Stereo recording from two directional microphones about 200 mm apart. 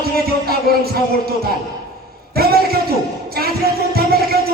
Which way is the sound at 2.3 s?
50° right (ahead or behind).